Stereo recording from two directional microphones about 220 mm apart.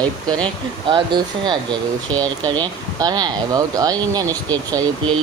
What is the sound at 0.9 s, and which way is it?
Speech, 20° right (ahead or behind).